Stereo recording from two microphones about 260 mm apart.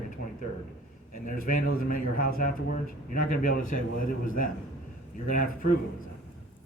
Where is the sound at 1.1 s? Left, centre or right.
Left.